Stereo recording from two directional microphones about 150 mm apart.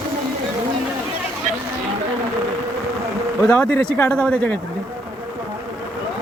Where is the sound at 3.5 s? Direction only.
10° left (ahead or behind).